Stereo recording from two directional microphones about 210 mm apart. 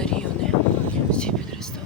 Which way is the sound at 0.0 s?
5° left (ahead or behind).